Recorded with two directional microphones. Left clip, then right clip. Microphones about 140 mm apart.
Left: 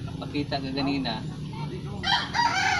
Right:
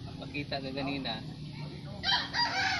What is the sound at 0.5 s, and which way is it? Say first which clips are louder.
Speech: left 6 dB; 20° right (ahead or behind).